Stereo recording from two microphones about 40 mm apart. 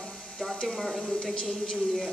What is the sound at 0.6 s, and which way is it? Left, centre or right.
Speech, centre.